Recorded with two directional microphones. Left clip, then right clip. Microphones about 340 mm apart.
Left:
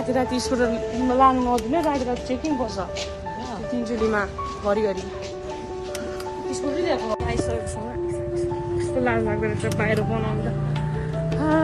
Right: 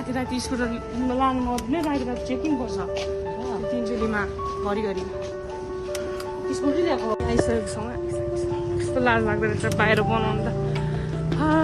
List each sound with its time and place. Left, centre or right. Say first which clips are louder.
0.1 s speech: left 5 dB; centre
4.1 s speech: left 2 dB; centre
6.5 s speech: right 1 dB; centre
8.4 s speech: left 1 dB; centre
11.3 s music: even; centre